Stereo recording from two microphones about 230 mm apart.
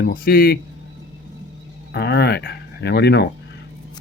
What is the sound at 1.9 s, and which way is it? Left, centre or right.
Speech, left.